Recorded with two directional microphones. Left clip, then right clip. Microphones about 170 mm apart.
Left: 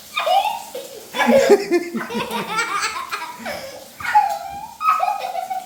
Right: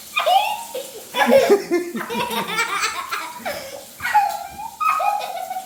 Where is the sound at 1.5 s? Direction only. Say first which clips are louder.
Left 2 dB; 10° left (ahead or behind).